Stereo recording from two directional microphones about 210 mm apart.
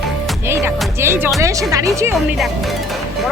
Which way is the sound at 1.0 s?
10° right (ahead or behind).